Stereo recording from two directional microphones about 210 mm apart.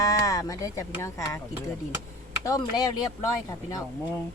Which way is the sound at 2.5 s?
20° left (ahead or behind).